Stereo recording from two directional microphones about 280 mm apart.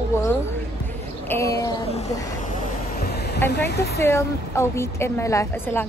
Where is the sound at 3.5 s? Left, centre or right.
Left.